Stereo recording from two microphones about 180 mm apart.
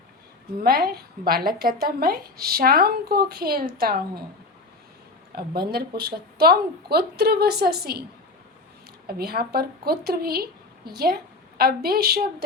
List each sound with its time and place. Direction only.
0.6 s speech: 60° right (ahead or behind)
5.3 s speech: 60° right (ahead or behind)
9.0 s a woman's voice: 60° right (ahead or behind)